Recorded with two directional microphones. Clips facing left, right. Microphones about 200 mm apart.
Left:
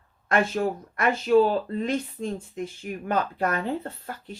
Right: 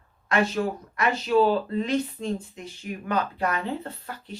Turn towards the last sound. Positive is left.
turn(degrees=45)  # may be behind; listen again after turning